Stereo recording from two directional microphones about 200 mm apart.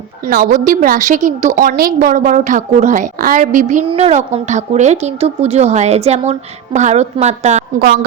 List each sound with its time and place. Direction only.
0.3 s a woman's voice: 45° right (ahead or behind)